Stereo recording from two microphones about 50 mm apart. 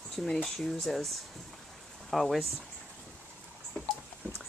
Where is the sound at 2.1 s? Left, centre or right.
Centre.